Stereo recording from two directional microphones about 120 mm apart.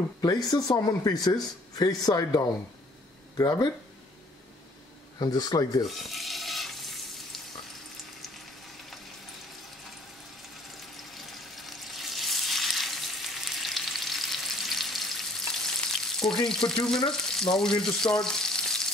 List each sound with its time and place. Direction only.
0.2 s speech: 35° left (ahead or behind)
5.2 s speech: 35° left (ahead or behind)
5.9 s frying: centre (ahead or behind)
11.1 s frying: centre (ahead or behind)
16.3 s speech: 5° left (ahead or behind)
17.3 s frying: 5° left (ahead or behind)